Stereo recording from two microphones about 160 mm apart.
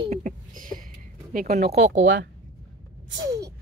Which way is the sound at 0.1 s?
55° right (ahead or behind).